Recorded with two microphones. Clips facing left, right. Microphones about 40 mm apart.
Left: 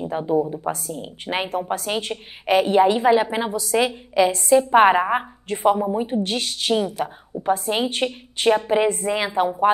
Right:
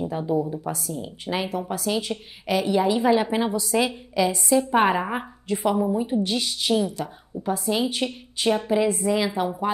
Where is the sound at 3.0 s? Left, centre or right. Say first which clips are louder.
Left 2 dB; centre.